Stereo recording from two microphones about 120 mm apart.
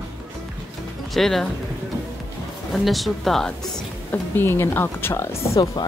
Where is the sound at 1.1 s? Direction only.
Centre (ahead or behind).